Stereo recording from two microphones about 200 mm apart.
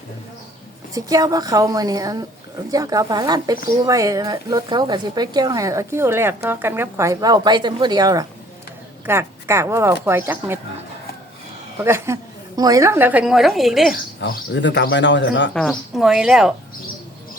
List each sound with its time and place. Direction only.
0.9 s speech: 15° right (ahead or behind)
11.8 s speech: 10° right (ahead or behind)
13.9 s speech: 55° left (ahead or behind)
15.5 s a woman's voice: centre (ahead or behind)